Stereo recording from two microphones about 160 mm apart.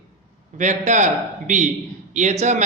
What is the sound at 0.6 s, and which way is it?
A man's voice, 50° right (ahead or behind).